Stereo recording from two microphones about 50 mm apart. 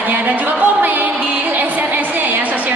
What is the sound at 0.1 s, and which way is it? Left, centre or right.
Music, right.